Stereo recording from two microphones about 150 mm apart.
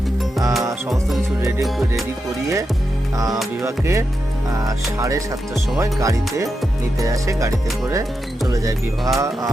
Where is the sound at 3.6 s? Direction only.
20° right (ahead or behind).